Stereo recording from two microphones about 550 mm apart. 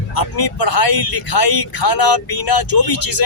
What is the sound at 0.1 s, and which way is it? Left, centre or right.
A man's voice, left.